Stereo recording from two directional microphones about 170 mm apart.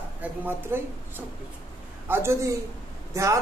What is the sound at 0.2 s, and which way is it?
Speech, 15° right (ahead or behind).